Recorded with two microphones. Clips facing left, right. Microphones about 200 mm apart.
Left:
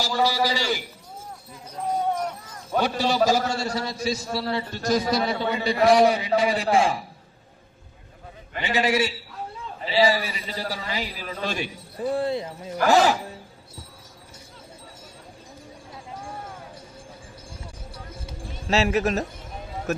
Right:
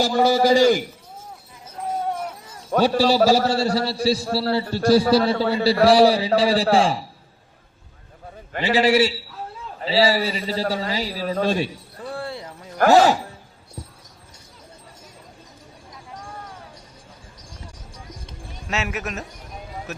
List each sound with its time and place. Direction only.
0.0 s a man's voice: 55° right (ahead or behind)
2.8 s a man's voice: 35° right (ahead or behind)
8.6 s a man's voice: 30° right (ahead or behind)
9.3 s a sound: centre (ahead or behind)
9.8 s a man's voice: 30° right (ahead or behind)
11.9 s speech: 20° left (ahead or behind)
17.9 s clip-clop: 5° left (ahead or behind)
18.7 s a man's voice: 30° left (ahead or behind)
19.9 s speech: 50° left (ahead or behind)